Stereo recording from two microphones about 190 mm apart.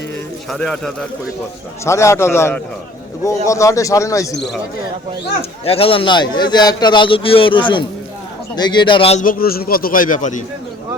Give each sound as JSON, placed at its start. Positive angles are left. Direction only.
{"t": 0.5, "sound": "speech", "side_deg": 5}
{"t": 1.8, "sound": "a man's voice", "side_deg": 15}
{"t": 5.4, "sound": "a man's voice", "side_deg": 30}
{"t": 9.2, "sound": "speech", "side_deg": 50}